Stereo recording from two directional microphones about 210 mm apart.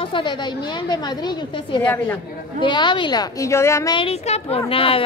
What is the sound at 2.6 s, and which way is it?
A woman's voice, 20° left (ahead or behind).